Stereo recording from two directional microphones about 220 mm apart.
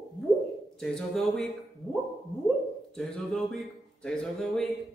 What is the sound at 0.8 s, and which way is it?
Speech, centre (ahead or behind).